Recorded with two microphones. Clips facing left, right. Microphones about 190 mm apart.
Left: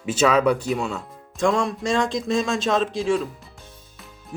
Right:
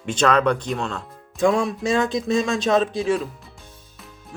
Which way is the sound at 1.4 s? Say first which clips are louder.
Right 2 dB; 5° right (ahead or behind).